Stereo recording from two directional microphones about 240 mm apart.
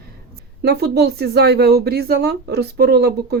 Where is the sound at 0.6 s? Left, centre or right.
Right.